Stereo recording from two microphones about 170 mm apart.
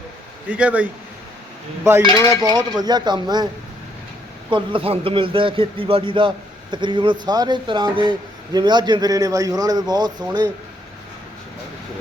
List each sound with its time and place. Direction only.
0.5 s speech: 10° right (ahead or behind)
2.0 s cutlery: 20° left (ahead or behind)
2.4 s a man's voice: 25° right (ahead or behind)
4.5 s a man's voice: 30° right (ahead or behind)